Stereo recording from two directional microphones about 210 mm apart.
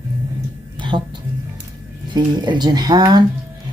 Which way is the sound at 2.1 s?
20° right (ahead or behind).